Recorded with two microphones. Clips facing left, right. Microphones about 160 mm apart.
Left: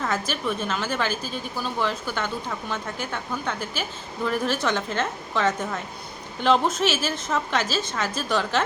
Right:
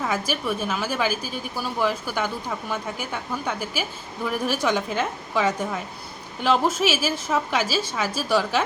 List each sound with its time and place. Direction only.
0.0 s a woman's voice: 10° right (ahead or behind)